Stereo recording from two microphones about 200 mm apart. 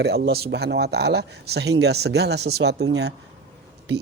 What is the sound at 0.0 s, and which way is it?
A man's voice, 55° right (ahead or behind).